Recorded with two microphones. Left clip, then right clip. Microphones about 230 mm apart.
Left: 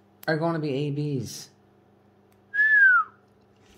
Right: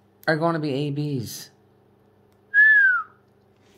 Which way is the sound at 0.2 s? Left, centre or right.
Centre.